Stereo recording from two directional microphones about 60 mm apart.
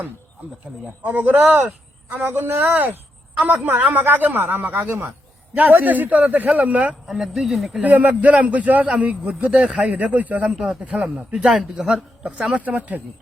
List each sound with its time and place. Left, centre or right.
0.7 s speech: centre
1.0 s a man's voice: right
7.1 s speech: centre
7.8 s a man's voice: right
12.5 s a man's voice: right